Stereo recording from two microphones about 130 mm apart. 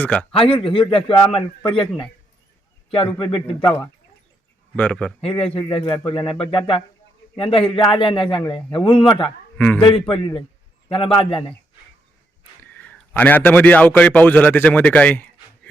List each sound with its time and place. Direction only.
0.0 s a man's voice: 10° left (ahead or behind)
0.3 s a man's voice: 45° left (ahead or behind)
2.9 s a man's voice: 45° left (ahead or behind)
4.7 s a man's voice: 10° left (ahead or behind)
5.2 s a man's voice: 50° left (ahead or behind)
9.6 s a man's voice: 10° left (ahead or behind)
9.8 s a man's voice: 45° left (ahead or behind)
12.7 s a man's voice: 10° left (ahead or behind)